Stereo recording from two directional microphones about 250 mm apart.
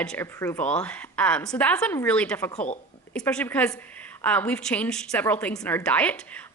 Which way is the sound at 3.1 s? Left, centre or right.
Centre.